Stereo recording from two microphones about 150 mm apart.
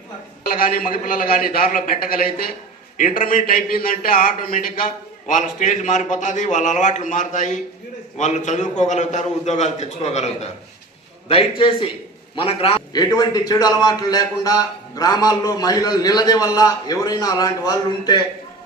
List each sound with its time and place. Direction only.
0.4 s a man's voice: 75° left (ahead or behind); by 12.8 s 40° left (ahead or behind)
12.9 s a man's voice: 25° left (ahead or behind)